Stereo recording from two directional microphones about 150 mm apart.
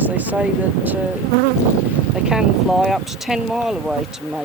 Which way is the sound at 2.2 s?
5° right (ahead or behind).